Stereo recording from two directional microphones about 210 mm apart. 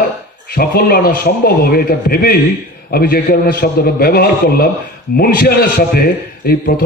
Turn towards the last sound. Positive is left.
turn(degrees=45)  # may be behind; listen again after turning